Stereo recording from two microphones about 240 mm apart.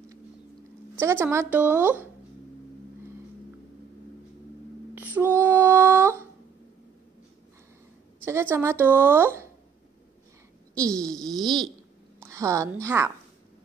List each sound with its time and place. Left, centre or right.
0.9 s a woman's voice: centre
4.9 s female singing: centre
8.3 s a woman's voice: centre
10.8 s a woman's voice: centre